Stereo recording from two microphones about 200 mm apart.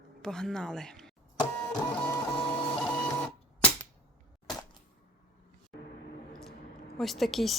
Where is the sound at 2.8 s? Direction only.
5° left (ahead or behind).